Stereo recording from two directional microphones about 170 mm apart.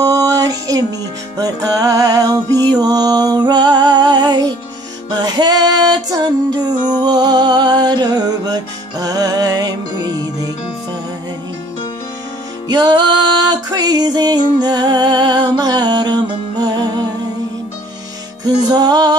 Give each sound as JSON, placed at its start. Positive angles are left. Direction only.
{"t": 0.0, "sound": "music", "side_deg": -20}
{"t": 12.6, "sound": "music", "side_deg": -25}
{"t": 18.4, "sound": "music", "side_deg": -25}